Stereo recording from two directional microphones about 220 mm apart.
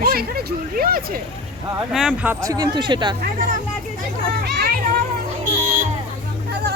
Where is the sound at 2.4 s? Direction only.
15° right (ahead or behind).